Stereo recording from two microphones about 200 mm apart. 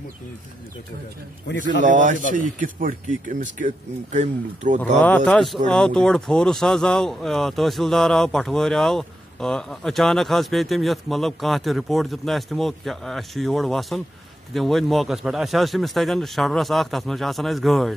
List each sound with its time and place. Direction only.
1.8 s speech: 40° right (ahead or behind)
5.0 s speech: 5° left (ahead or behind)